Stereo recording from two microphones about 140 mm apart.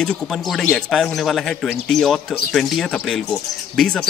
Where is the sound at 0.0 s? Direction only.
5° left (ahead or behind).